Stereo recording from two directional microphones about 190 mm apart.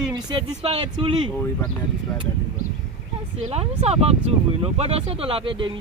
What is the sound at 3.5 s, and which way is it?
Speech, 35° right (ahead or behind).